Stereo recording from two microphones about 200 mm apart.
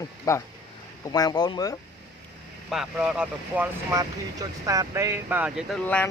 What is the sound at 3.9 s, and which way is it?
Speech, 15° right (ahead or behind).